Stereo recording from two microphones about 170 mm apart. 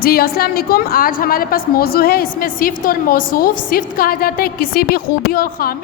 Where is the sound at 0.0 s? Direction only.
65° left (ahead or behind).